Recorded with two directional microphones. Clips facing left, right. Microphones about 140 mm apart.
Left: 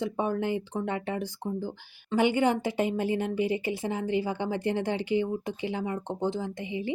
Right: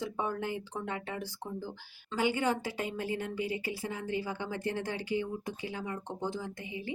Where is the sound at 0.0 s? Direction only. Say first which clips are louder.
Left 6 dB; 20° left (ahead or behind).